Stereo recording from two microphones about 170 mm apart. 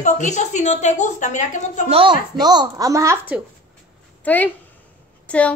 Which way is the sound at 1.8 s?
30° right (ahead or behind).